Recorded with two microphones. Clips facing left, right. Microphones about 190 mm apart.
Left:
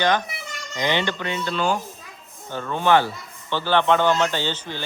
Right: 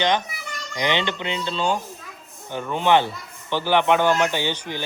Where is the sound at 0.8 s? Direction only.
20° right (ahead or behind).